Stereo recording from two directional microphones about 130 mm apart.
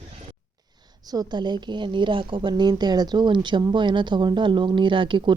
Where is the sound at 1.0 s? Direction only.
30° right (ahead or behind).